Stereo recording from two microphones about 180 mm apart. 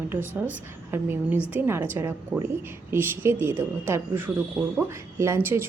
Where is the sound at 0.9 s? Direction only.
10° right (ahead or behind).